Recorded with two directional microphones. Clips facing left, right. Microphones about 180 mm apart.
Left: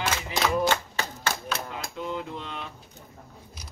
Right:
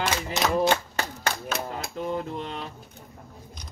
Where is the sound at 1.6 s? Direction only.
40° right (ahead or behind).